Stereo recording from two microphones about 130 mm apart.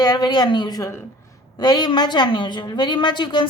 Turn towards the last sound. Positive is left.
turn(degrees=35)  # may be behind; listen again after turning